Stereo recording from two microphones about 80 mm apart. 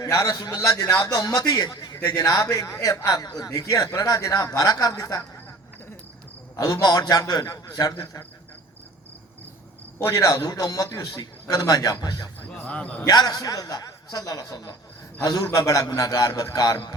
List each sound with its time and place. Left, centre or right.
0.0 s a man's voice: left
2.0 s a man's voice: left
6.6 s a man's voice: left
10.0 s a man's voice: left
12.4 s a man's voice: centre
13.1 s a man's voice: left